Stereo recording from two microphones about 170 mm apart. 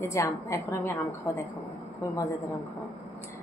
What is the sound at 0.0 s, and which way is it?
Speech, 15° left (ahead or behind).